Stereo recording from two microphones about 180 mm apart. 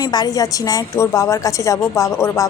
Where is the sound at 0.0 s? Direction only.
20° left (ahead or behind).